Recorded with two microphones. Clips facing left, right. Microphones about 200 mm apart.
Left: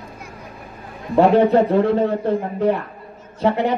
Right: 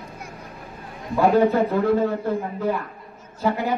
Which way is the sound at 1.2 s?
30° left (ahead or behind).